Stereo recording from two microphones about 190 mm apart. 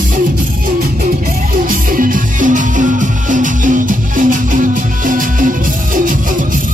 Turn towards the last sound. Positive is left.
turn(degrees=-45)  # may be behind; listen again after turning